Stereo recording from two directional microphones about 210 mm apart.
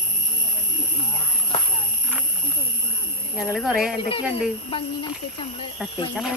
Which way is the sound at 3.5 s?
Centre (ahead or behind).